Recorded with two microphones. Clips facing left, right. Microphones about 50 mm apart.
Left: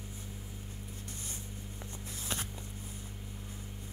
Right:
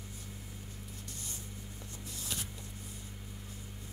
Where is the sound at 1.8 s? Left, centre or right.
Left.